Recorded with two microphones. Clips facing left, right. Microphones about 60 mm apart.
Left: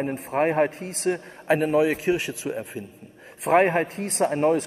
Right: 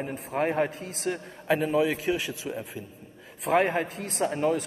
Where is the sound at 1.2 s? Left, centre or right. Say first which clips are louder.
Left 1 dB; left.